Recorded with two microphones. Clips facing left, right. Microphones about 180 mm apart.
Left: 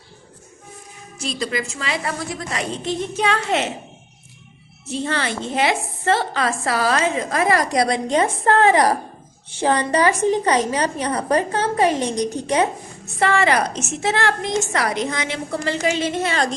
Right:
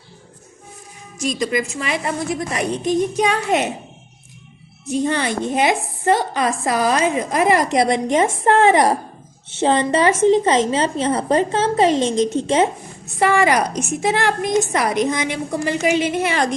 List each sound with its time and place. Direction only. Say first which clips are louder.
1.4 s a woman's voice: right 3 dB; 20° right (ahead or behind)
4.9 s a woman's voice: right 4 dB; 15° right (ahead or behind)